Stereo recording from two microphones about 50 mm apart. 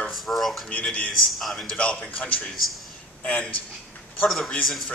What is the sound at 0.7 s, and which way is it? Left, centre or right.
Speech, left.